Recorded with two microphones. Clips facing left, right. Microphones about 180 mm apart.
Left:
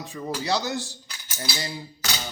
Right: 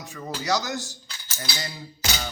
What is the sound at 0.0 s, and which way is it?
Speech, 30° left (ahead or behind).